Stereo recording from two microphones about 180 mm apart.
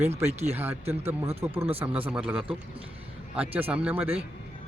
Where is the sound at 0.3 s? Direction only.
35° right (ahead or behind).